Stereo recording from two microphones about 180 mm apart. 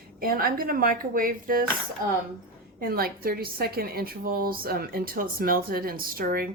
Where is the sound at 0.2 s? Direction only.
55° right (ahead or behind).